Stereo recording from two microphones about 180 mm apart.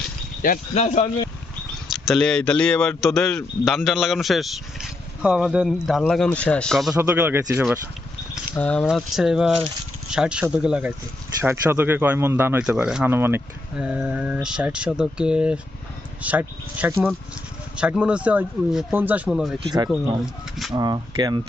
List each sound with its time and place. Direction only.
0.4 s speech: 45° left (ahead or behind)
1.9 s a man's voice: centre (ahead or behind)
7.1 s speech: 10° right (ahead or behind)
8.5 s a man's voice: 10° left (ahead or behind)
20.7 s speech: 20° right (ahead or behind)